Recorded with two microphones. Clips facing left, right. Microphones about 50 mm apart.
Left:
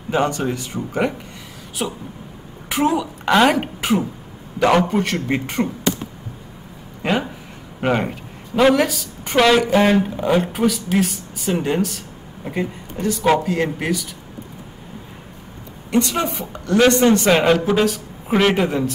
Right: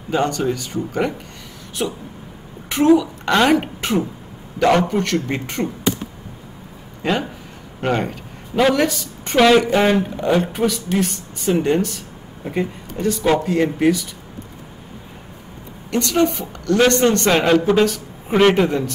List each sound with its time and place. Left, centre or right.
0.1 s a man's voice: centre
1.8 s a woman's voice: centre
7.0 s a man's voice: centre
15.9 s a man's voice: centre